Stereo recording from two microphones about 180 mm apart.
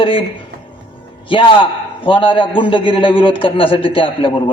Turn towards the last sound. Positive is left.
turn(degrees=30)  # may be behind; listen again after turning